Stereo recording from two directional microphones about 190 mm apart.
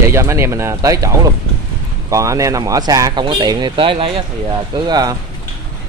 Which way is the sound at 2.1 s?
15° right (ahead or behind).